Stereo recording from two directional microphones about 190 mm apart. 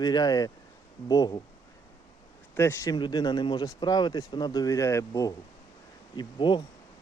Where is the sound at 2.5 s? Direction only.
15° left (ahead or behind).